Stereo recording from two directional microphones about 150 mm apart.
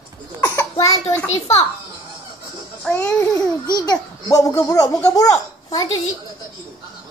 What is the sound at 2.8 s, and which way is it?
Music, 10° left (ahead or behind).